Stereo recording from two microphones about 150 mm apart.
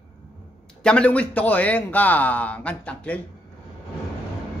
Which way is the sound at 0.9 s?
10° left (ahead or behind).